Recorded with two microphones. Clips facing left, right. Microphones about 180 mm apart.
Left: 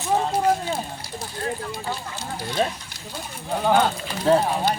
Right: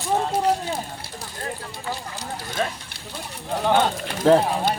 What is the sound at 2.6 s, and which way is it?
Speech, 25° left (ahead or behind).